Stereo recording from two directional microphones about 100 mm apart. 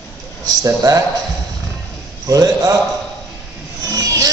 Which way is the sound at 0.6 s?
35° right (ahead or behind).